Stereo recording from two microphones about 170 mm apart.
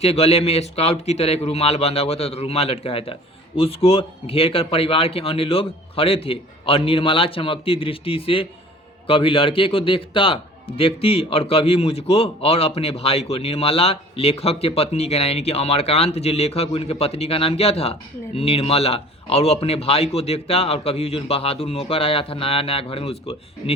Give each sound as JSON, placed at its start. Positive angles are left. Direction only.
{"t": 0.0, "sound": "a man's voice", "side_deg": 35}